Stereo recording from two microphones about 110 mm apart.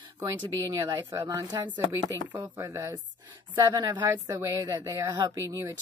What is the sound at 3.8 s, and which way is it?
Speech, 45° right (ahead or behind).